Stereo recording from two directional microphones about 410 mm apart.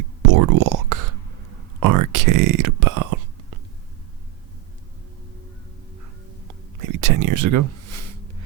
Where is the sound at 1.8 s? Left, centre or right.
Right.